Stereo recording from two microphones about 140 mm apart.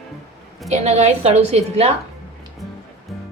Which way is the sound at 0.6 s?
50° right (ahead or behind).